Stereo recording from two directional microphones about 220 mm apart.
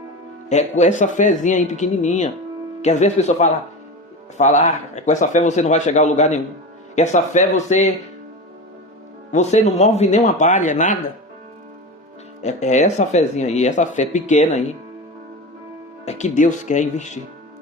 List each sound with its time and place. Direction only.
0.5 s speech: 30° left (ahead or behind)
9.3 s speech: 30° left (ahead or behind)
12.4 s speech: 30° left (ahead or behind)
16.0 s speech: 30° left (ahead or behind)